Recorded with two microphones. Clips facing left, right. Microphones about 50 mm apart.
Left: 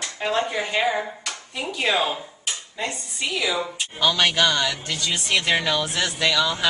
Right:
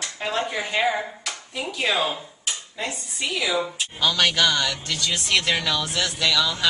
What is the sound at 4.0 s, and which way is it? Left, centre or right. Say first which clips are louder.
A man's voice: left 1 dB; centre.